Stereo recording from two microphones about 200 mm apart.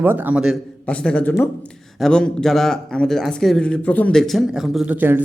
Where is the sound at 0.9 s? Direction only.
5° left (ahead or behind).